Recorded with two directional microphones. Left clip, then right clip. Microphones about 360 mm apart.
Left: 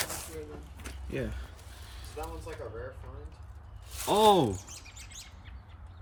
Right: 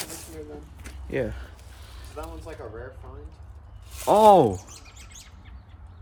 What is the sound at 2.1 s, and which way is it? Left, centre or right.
Speech, centre.